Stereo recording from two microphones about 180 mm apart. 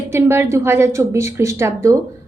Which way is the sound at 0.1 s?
15° right (ahead or behind).